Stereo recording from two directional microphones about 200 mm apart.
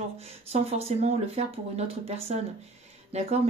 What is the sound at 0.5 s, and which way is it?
Speech, 30° right (ahead or behind).